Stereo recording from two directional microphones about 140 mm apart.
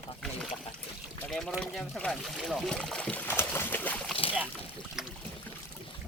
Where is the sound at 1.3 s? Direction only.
Centre (ahead or behind).